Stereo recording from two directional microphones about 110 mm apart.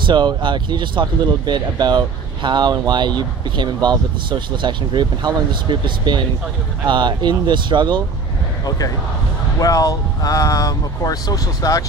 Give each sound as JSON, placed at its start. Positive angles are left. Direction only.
{"t": 0.0, "sound": "speech", "side_deg": -45}
{"t": 8.6, "sound": "speech", "side_deg": 35}